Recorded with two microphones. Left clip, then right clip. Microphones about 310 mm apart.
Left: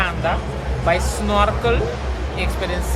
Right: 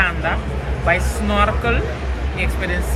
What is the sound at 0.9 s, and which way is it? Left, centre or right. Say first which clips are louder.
Speech: even; centre.